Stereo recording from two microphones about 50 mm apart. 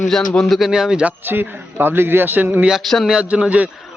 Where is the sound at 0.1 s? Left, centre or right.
Centre.